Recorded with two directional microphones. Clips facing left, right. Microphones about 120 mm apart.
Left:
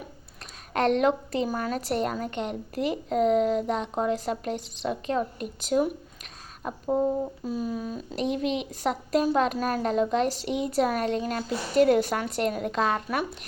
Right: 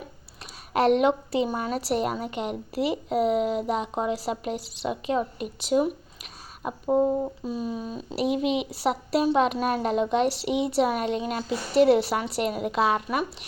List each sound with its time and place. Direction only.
0.7 s a woman's voice: 5° right (ahead or behind)
6.6 s speech: 15° right (ahead or behind)
7.4 s a woman's voice: centre (ahead or behind)